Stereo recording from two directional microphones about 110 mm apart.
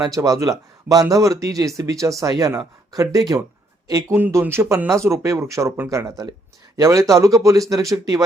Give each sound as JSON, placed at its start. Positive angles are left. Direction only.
{"t": 0.0, "sound": "speech", "side_deg": -35}
{"t": 4.1, "sound": "speech", "side_deg": -20}